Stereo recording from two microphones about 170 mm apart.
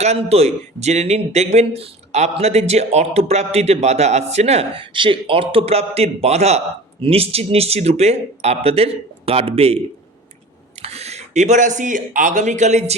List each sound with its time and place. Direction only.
0.0 s a man's voice: 40° right (ahead or behind)
10.8 s speech: 40° right (ahead or behind)